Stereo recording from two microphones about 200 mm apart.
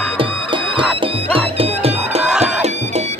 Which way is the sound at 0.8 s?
30° right (ahead or behind).